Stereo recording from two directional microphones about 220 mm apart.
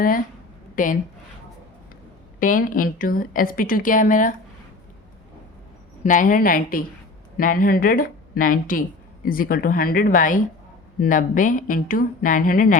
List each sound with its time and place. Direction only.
0.0 s a woman's voice: 40° left (ahead or behind)
2.4 s a woman's voice: 40° left (ahead or behind)
6.0 s a woman's voice: 35° left (ahead or behind)